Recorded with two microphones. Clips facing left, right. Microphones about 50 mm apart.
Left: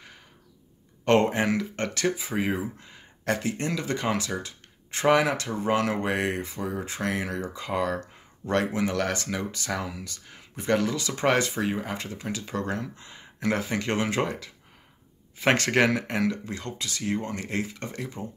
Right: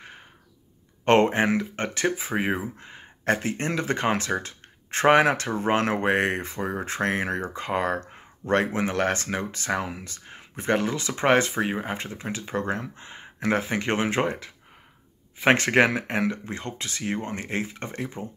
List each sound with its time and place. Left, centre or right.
1.0 s speech: right